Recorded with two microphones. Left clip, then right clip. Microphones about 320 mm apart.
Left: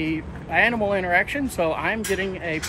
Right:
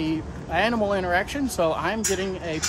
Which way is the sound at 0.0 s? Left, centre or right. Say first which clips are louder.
Left 1 dB; centre.